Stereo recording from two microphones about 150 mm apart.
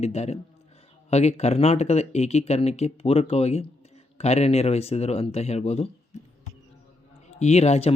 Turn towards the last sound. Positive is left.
turn(degrees=45)  # may be behind; listen again after turning